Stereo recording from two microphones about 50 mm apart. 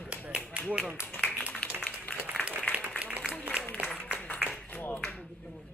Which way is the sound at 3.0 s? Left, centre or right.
Right.